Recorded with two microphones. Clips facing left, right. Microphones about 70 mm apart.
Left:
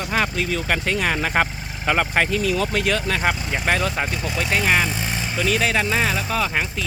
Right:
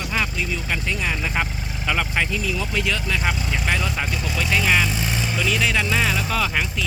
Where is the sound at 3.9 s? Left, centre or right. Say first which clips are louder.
Left 2 dB; left.